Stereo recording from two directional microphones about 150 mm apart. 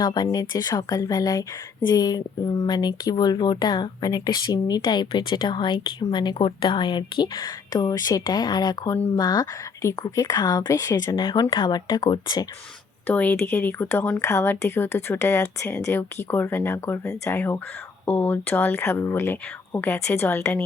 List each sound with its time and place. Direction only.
0.0 s speech: 25° left (ahead or behind)
13.1 s speech: 10° left (ahead or behind)